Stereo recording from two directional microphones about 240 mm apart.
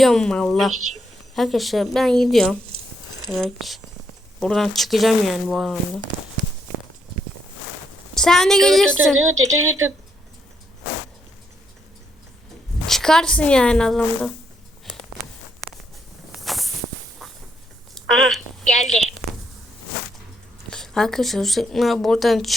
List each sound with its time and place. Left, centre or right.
0.0 s speech: centre
8.1 s speech: centre
9.6 s speech: right
12.9 s speech: centre
16.3 s walk: centre
17.9 s a woman's voice: centre
19.0 s a sound: centre
20.7 s speech: centre